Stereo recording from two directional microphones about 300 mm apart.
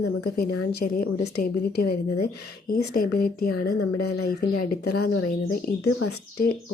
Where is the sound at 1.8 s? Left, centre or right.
Left.